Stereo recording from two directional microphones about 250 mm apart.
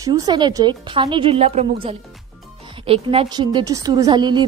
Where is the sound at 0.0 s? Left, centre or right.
Centre.